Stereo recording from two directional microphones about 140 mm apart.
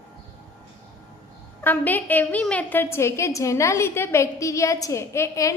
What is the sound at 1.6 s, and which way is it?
A woman's voice, 10° left (ahead or behind).